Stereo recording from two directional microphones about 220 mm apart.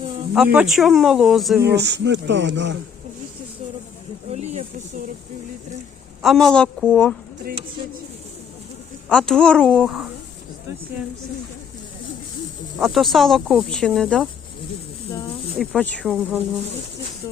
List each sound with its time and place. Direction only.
0.3 s speech: 5° right (ahead or behind)
1.6 s speech: 50° right (ahead or behind)
4.3 s a sound: 30° right (ahead or behind)
6.2 s speech: centre (ahead or behind)
9.0 s speech: 5° left (ahead or behind)
12.8 s speech: centre (ahead or behind)
15.5 s speech: 5° left (ahead or behind)